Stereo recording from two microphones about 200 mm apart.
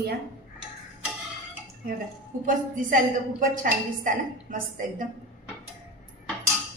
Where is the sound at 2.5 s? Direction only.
40° right (ahead or behind).